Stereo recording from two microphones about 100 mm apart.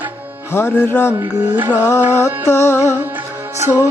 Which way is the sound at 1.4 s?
20° right (ahead or behind).